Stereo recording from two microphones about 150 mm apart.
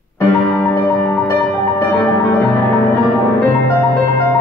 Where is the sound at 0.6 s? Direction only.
10° left (ahead or behind).